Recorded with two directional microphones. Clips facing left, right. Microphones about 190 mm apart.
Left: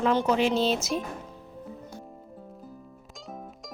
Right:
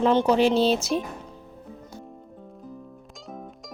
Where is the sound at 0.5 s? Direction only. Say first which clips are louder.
Right 4 dB; centre (ahead or behind).